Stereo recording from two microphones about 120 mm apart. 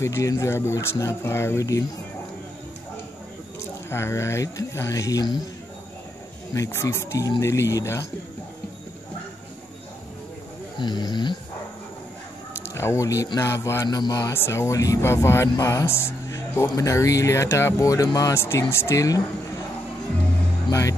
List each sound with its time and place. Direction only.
0.0 s speech: 25° left (ahead or behind)
3.9 s speech: 25° left (ahead or behind)
6.5 s speech: 25° left (ahead or behind)
10.8 s speech: 35° left (ahead or behind)
12.7 s speech: 20° left (ahead or behind)